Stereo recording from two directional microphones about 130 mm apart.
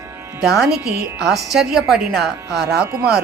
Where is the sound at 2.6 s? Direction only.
20° right (ahead or behind).